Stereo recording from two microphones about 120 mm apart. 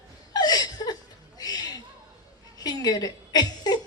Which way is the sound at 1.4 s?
35° left (ahead or behind).